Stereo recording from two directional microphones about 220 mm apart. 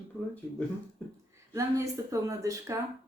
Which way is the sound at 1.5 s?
15° right (ahead or behind).